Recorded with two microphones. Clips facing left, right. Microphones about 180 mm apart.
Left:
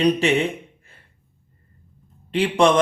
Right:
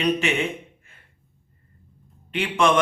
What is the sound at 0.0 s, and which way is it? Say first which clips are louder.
Speech: left 4 dB; 35° left (ahead or behind).